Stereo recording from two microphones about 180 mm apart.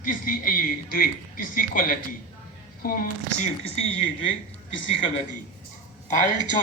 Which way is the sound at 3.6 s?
30° left (ahead or behind).